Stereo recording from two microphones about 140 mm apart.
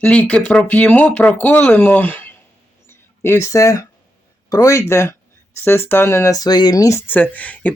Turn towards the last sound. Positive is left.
turn(degrees=10)  # may be behind; listen again after turning